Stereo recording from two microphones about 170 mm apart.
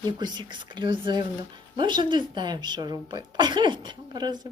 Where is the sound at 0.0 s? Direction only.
25° right (ahead or behind).